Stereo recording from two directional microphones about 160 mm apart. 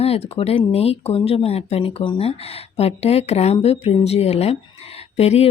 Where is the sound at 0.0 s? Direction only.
40° left (ahead or behind).